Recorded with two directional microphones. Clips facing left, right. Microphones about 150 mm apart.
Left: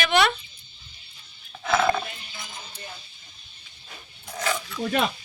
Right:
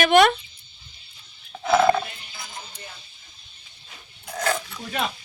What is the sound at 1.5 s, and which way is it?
Dog, 10° right (ahead or behind).